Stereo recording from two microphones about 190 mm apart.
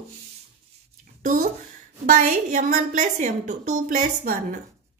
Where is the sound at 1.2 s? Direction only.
45° right (ahead or behind).